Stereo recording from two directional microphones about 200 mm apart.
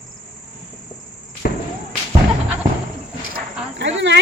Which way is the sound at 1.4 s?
45° left (ahead or behind).